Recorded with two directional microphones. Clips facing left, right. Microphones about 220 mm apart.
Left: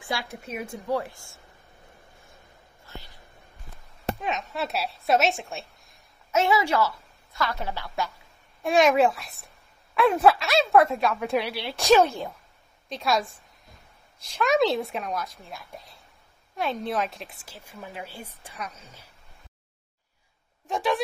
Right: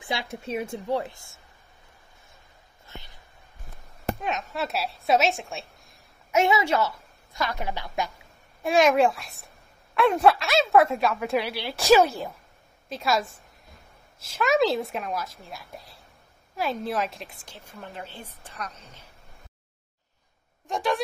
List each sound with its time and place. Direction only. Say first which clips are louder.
0.0 s a woman's voice: right 1 dB; 20° right (ahead or behind)
2.9 s a sound: left 1 dB; 20° right (ahead or behind)
4.2 s a woman's voice: even; centre (ahead or behind)
6.3 s a woman's voice: right 1 dB; 20° right (ahead or behind)
8.6 s a woman's voice: even; centre (ahead or behind)
20.6 s a woman's voice: left 1 dB; centre (ahead or behind)